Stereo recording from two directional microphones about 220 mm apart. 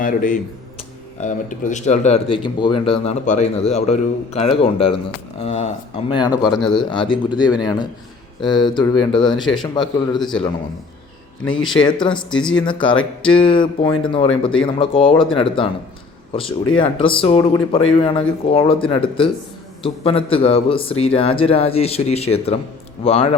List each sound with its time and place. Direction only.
0.0 s speech: 35° left (ahead or behind); by 6.4 s 20° left (ahead or behind)
6.4 s speech: centre (ahead or behind)
6.7 s speech: 20° left (ahead or behind)
11.5 s speech: 20° left (ahead or behind)